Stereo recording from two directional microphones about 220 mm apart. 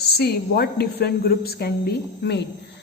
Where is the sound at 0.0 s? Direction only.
45° left (ahead or behind).